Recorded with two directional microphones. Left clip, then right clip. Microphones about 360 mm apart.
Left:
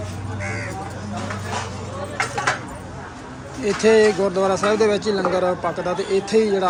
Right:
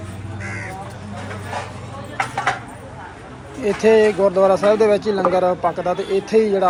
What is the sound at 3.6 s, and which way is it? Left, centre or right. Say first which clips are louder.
Speech: right 1 dB; centre.